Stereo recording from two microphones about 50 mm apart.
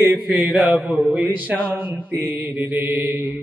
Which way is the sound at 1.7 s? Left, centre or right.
Right.